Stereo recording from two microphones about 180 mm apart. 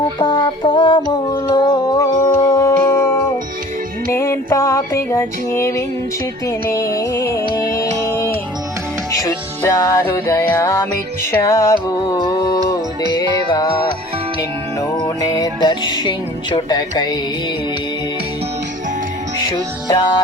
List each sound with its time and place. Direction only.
0.2 s music: 25° left (ahead or behind)
4.1 s music: 15° left (ahead or behind)
7.9 s music: 15° right (ahead or behind)
9.1 s music: 15° left (ahead or behind)
13.0 s music: 25° right (ahead or behind)
15.0 s music: 20° left (ahead or behind)
19.5 s music: 20° left (ahead or behind)